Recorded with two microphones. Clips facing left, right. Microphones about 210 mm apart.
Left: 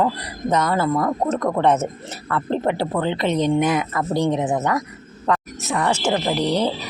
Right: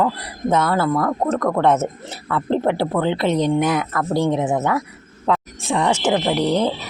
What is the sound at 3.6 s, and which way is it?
Speech, centre (ahead or behind).